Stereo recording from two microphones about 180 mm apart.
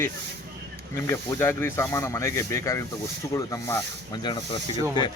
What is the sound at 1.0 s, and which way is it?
Speech, 15° left (ahead or behind).